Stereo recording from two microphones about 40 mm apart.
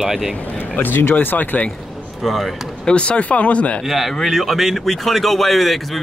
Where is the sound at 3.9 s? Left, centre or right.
Centre.